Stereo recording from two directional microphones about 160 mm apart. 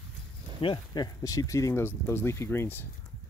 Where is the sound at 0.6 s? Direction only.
25° left (ahead or behind).